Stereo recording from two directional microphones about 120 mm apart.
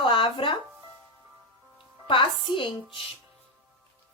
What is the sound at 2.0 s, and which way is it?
Speech, 45° left (ahead or behind).